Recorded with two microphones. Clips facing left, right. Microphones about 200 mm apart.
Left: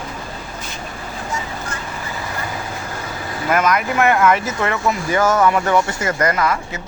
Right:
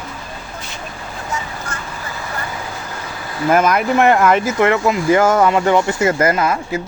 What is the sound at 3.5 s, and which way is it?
Speech, 30° right (ahead or behind).